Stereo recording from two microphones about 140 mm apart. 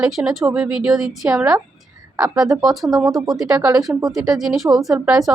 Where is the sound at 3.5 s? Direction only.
25° right (ahead or behind).